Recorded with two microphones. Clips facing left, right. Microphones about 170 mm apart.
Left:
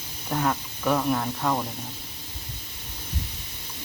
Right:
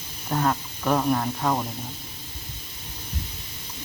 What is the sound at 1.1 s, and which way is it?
Speech, 5° right (ahead or behind).